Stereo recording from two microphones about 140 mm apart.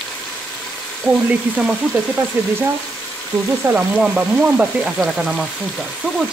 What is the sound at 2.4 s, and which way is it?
Speech, 20° right (ahead or behind).